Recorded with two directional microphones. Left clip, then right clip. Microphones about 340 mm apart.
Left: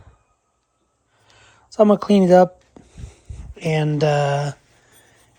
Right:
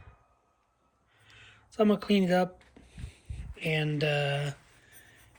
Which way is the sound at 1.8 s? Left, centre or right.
Left.